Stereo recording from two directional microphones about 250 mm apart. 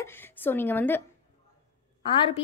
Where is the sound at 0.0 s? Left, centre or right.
Centre.